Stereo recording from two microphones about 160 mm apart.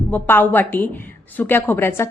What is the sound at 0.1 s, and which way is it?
A woman's voice, 10° left (ahead or behind).